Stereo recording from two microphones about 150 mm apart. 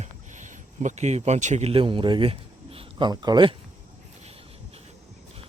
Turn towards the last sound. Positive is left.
turn(degrees=-30)  # may be behind; listen again after turning